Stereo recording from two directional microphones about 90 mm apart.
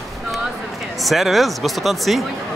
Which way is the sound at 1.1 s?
Centre (ahead or behind).